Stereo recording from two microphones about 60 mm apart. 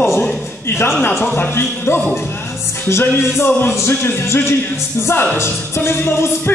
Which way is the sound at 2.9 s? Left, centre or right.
Left.